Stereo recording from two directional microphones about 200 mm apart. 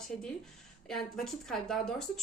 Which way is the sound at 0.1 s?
5° left (ahead or behind).